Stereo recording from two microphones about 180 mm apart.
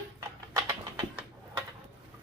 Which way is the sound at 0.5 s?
15° right (ahead or behind).